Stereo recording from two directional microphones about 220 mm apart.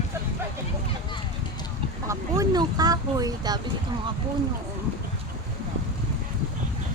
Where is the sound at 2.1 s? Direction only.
15° right (ahead or behind).